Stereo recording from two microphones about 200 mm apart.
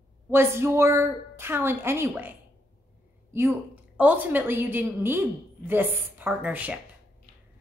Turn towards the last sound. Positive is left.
turn(degrees=-10)  # may be behind; listen again after turning